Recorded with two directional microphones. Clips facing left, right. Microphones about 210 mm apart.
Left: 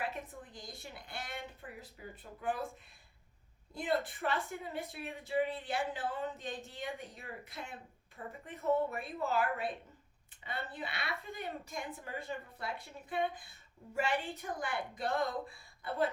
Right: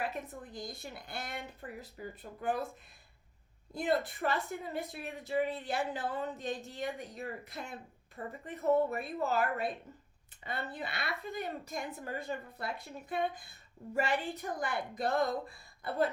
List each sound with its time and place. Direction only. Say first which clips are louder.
0.0 s a woman's voice: right 2 dB; 40° right (ahead or behind)
3.8 s speech: right 3 dB; 40° right (ahead or behind)